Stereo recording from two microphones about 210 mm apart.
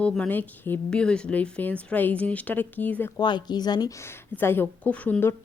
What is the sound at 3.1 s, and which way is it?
Speech, 20° left (ahead or behind).